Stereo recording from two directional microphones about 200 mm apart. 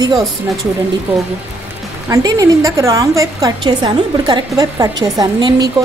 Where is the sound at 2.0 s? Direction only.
15° right (ahead or behind).